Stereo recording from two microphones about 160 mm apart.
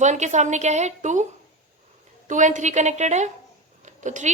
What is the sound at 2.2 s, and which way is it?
A woman's voice, 50° right (ahead or behind).